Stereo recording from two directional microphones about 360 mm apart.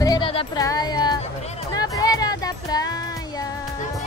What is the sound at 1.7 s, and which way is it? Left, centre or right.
Music, centre.